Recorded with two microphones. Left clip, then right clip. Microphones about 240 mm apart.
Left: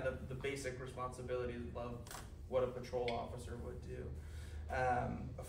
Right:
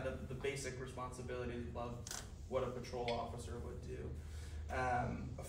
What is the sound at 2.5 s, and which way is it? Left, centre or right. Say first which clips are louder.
Speech: left 3 dB; centre.